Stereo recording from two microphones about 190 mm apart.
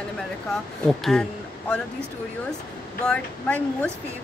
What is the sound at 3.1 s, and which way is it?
Speech, 5° left (ahead or behind).